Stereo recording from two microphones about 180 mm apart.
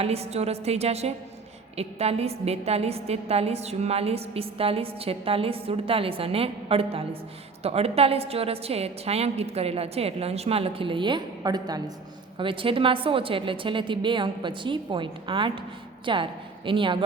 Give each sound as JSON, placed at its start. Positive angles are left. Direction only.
{"t": 0.0, "sound": "a woman's voice", "side_deg": -35}